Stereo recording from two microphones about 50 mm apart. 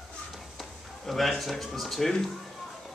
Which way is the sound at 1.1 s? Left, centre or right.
Centre.